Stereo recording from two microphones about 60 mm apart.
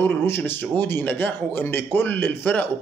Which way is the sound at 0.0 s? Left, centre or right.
Left.